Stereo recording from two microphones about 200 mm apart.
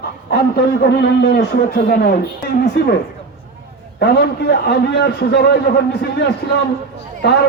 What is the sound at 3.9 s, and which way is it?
A man's voice, 55° left (ahead or behind).